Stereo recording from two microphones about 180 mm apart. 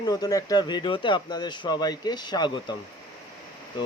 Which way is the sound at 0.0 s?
20° left (ahead or behind).